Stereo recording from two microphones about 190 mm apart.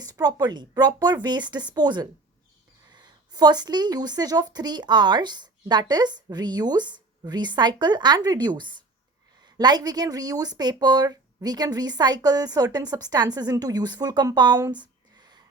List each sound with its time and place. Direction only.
0.0 s speech: 20° right (ahead or behind)